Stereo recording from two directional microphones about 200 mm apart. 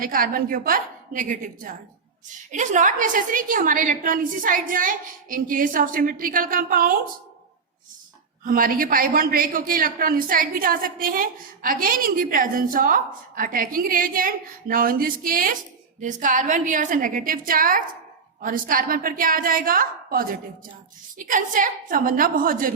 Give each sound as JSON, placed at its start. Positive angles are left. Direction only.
{"t": 0.0, "sound": "a man's voice", "side_deg": -45}
{"t": 8.4, "sound": "a man's voice", "side_deg": -45}